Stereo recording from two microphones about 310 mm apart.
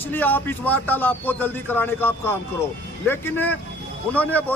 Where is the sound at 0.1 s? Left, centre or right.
Centre.